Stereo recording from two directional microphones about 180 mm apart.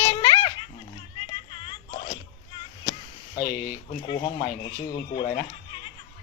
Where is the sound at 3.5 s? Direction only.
55° left (ahead or behind).